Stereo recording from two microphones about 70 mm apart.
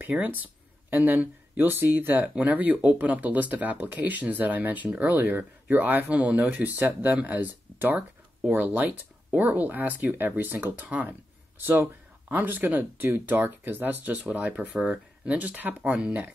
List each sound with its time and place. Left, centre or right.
0.0 s speech: right